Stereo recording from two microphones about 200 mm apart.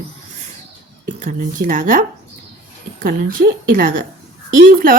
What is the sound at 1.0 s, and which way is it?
A woman's voice, 40° right (ahead or behind).